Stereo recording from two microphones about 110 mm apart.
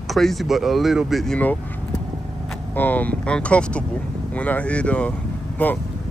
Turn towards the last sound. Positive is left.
turn(degrees=15)  # may be behind; listen again after turning